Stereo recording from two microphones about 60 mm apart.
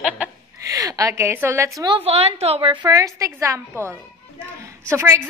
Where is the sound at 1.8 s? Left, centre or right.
Right.